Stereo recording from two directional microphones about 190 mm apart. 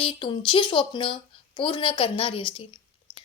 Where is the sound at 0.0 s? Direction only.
25° left (ahead or behind).